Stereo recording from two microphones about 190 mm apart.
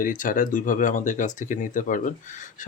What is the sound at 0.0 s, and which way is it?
Speech, 45° left (ahead or behind).